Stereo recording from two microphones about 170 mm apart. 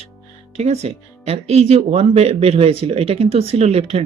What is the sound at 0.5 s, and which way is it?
Speech, 40° right (ahead or behind).